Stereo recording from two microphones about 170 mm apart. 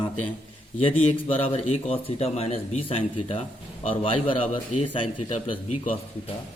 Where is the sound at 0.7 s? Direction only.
40° left (ahead or behind).